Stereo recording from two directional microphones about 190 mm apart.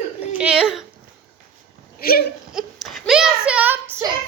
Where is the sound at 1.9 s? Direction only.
50° left (ahead or behind).